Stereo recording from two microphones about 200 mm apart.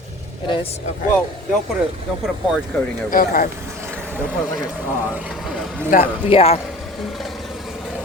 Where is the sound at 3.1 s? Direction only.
45° left (ahead or behind).